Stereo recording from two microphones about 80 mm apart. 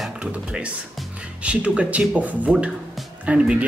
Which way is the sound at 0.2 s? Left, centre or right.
Centre.